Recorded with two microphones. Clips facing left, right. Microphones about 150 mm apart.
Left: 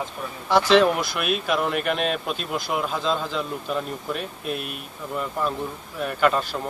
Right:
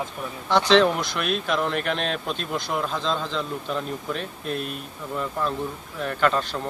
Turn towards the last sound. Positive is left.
turn(degrees=5)  # may be behind; listen again after turning